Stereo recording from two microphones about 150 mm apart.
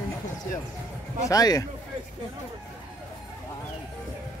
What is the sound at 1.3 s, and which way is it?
Speech, 25° left (ahead or behind).